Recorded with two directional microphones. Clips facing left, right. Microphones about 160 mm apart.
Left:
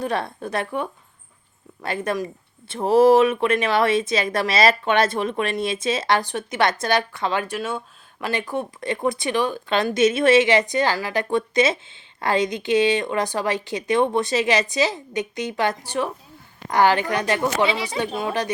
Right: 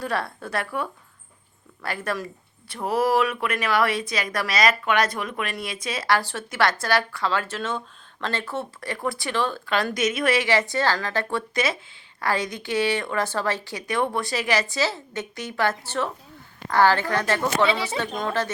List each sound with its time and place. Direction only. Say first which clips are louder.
0.0 s speech: left 3 dB; 20° left (ahead or behind)